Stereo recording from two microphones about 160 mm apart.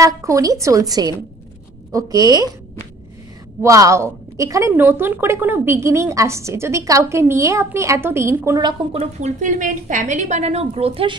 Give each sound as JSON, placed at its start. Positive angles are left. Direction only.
{"t": 0.0, "sound": "a woman's voice", "side_deg": -20}
{"t": 3.6, "sound": "speech", "side_deg": -20}
{"t": 9.0, "sound": "a woman's voice", "side_deg": -50}